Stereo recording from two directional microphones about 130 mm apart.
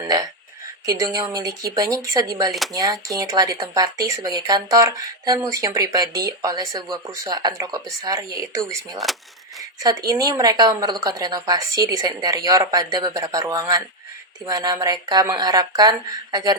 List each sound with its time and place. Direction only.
0.9 s speech: 25° right (ahead or behind)
9.1 s speech: centre (ahead or behind)
9.8 s speech: 30° right (ahead or behind)